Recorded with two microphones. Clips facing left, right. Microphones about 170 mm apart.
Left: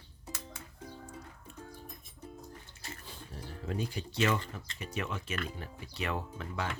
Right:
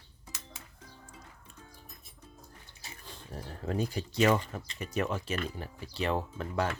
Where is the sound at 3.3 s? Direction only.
45° right (ahead or behind).